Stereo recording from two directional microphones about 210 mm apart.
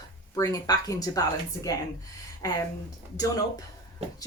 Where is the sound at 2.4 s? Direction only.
15° left (ahead or behind).